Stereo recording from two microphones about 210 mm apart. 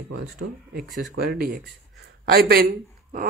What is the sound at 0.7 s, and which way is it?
Speech, 50° right (ahead or behind).